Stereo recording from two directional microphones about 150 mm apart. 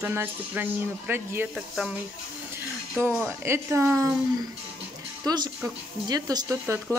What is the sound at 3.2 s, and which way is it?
Speech, 15° right (ahead or behind).